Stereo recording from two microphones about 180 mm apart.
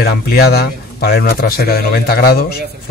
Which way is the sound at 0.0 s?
60° left (ahead or behind).